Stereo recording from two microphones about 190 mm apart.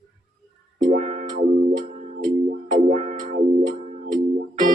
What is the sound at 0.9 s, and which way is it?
Music, 40° right (ahead or behind).